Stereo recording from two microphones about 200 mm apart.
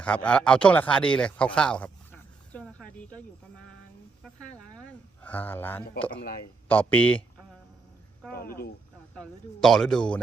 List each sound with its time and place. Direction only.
0.0 s speech: 5° left (ahead or behind)
2.5 s a sound: 5° left (ahead or behind)
6.7 s speech: 10° left (ahead or behind)
8.3 s speech: 50° left (ahead or behind)
9.1 s speech: 5° left (ahead or behind)